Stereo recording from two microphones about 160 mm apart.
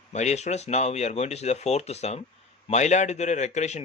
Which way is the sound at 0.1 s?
45° left (ahead or behind).